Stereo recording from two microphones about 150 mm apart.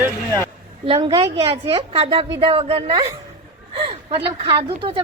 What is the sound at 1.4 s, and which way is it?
A woman's voice, 40° right (ahead or behind).